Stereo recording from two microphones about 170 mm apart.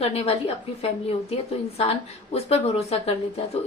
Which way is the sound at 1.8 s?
35° left (ahead or behind).